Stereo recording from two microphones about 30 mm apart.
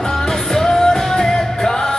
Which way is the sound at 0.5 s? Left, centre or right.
Centre.